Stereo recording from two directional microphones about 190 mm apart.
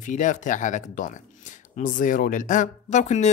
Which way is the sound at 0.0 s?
40° left (ahead or behind).